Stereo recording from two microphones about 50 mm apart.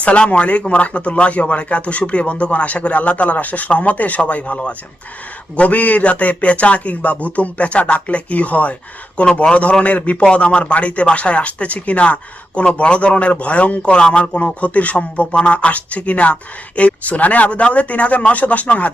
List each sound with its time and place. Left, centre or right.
0.0 s speech: left